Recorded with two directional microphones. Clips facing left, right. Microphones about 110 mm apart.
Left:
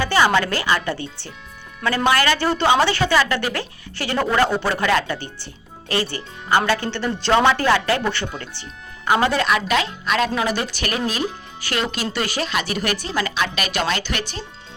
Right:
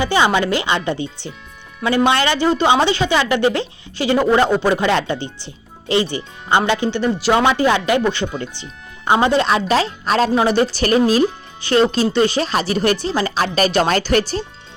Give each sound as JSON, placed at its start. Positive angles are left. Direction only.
{"t": 0.0, "sound": "a woman's voice", "side_deg": -15}